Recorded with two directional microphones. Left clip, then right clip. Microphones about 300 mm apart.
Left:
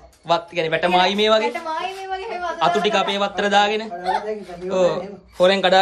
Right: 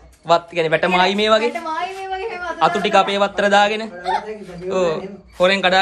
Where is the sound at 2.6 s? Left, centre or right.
Centre.